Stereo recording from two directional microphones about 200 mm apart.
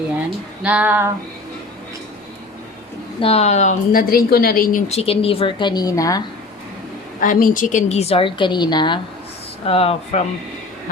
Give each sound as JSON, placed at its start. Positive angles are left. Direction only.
{"t": 0.6, "sound": "female singing", "side_deg": -5}
{"t": 3.2, "sound": "a woman's voice", "side_deg": 30}
{"t": 4.9, "sound": "a woman's voice", "side_deg": 30}
{"t": 7.2, "sound": "a woman's voice", "side_deg": 40}